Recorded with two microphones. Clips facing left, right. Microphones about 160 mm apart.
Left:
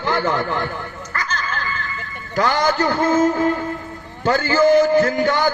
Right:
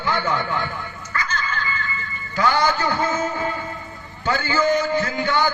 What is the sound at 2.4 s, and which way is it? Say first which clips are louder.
Speech: left 2 dB; 40° left (ahead or behind).